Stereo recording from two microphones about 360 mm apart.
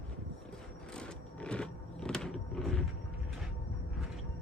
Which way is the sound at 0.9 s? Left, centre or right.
Centre.